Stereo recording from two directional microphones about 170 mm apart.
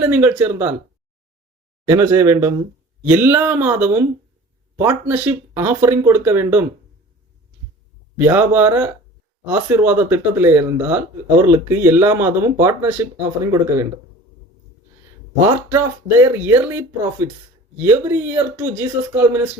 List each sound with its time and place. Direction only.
0.0 s speech: 10° right (ahead or behind)
1.9 s speech: 15° right (ahead or behind)
8.2 s speech: 10° right (ahead or behind)
15.4 s speech: 15° right (ahead or behind)